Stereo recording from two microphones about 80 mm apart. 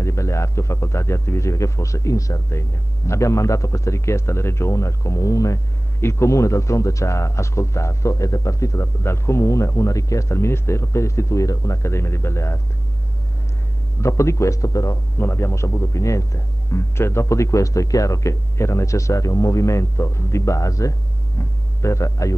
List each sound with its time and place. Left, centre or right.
0.0 s a man's voice: left
14.0 s a man's voice: left
15.1 s a man's voice: left